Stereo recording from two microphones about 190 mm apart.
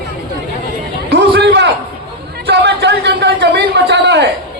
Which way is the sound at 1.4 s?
65° right (ahead or behind).